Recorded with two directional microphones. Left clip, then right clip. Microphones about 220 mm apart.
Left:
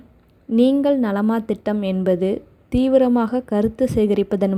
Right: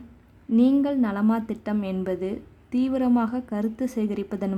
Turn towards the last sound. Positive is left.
turn(degrees=25)  # may be behind; listen again after turning